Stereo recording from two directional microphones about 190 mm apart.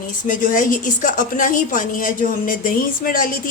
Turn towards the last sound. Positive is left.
turn(degrees=45)  # may be behind; listen again after turning